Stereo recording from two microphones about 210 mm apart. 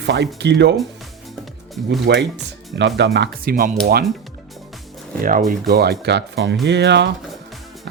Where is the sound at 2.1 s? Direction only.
55° right (ahead or behind).